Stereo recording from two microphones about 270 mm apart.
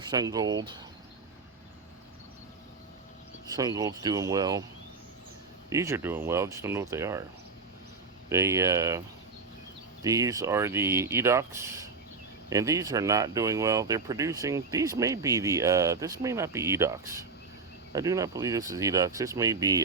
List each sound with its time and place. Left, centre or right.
0.1 s speech: centre
3.4 s speech: centre
5.7 s speech: centre
8.3 s speech: centre